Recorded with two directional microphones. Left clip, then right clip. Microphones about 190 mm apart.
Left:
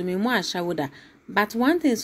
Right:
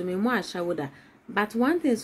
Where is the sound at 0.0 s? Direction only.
20° left (ahead or behind).